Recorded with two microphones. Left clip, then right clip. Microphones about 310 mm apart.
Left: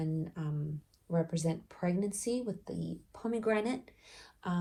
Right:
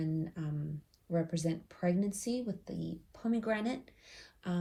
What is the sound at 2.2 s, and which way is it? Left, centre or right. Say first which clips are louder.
Speech: left 3 dB; left.